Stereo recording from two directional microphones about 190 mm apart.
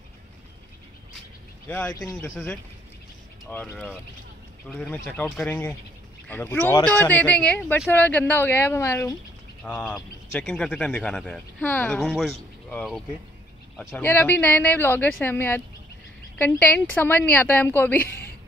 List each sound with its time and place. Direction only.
1.7 s a man's voice: 5° left (ahead or behind)
3.4 s a man's voice: 10° left (ahead or behind)
9.8 s a man's voice: centre (ahead or behind)